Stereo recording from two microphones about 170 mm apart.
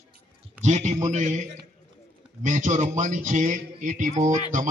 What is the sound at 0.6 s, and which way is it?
Speech, 40° right (ahead or behind).